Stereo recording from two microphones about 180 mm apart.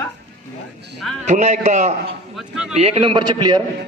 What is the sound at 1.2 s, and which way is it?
Speech, 40° right (ahead or behind).